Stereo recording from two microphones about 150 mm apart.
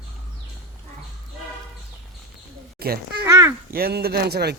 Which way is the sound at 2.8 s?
90° right.